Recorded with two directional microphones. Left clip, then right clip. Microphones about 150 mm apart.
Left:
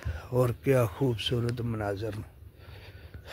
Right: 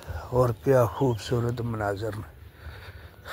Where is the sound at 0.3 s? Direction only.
25° left (ahead or behind).